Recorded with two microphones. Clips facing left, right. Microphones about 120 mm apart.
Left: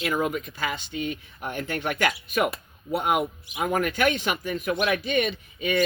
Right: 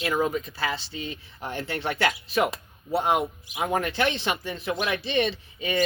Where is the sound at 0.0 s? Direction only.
35° right (ahead or behind).